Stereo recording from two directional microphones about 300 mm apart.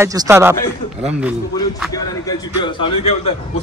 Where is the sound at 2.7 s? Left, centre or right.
Centre.